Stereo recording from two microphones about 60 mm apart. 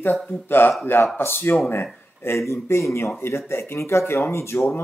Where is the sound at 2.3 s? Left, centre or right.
Left.